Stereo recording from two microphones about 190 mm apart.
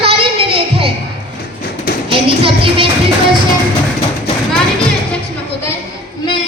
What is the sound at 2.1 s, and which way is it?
Music, 30° right (ahead or behind).